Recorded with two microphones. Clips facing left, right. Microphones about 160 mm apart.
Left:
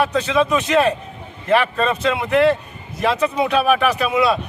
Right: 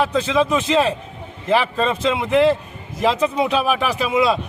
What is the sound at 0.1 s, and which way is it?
Speech, 25° right (ahead or behind).